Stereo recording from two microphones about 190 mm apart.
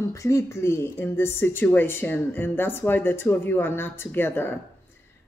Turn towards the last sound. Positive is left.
turn(degrees=10)  # may be behind; listen again after turning